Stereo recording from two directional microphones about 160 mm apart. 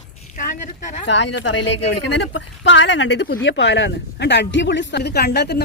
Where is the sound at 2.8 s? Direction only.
90° left.